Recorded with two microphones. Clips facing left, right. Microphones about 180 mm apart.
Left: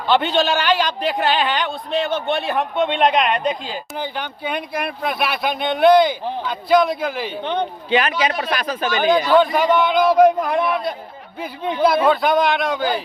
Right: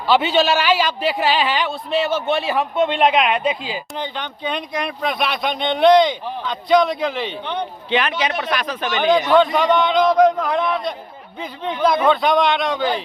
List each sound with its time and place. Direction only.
0.1 s a man's voice: 5° right (ahead or behind)
3.9 s a man's voice: 10° left (ahead or behind)
8.6 s speech: 40° left (ahead or behind)
9.0 s a man's voice: centre (ahead or behind)